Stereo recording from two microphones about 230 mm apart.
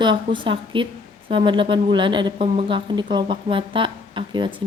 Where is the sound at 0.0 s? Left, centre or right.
Right.